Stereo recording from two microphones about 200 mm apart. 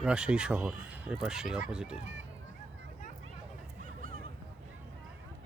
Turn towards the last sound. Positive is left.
turn(degrees=-45)  # may be behind; listen again after turning